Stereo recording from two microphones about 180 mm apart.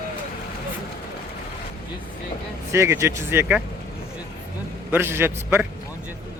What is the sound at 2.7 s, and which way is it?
Speech, 15° right (ahead or behind).